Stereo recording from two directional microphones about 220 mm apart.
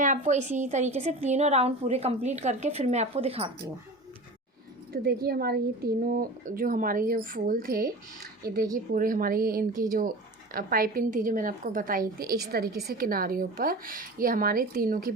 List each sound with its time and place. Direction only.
0.0 s a woman's voice: 35° right (ahead or behind)
4.9 s a woman's voice: 45° right (ahead or behind)